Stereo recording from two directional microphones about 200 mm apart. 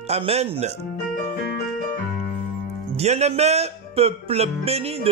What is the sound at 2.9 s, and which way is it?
Speech, 35° right (ahead or behind).